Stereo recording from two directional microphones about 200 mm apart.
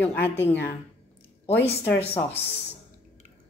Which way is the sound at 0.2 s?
10° left (ahead or behind).